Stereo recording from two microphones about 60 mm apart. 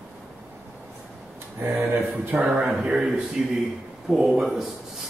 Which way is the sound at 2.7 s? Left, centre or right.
Centre.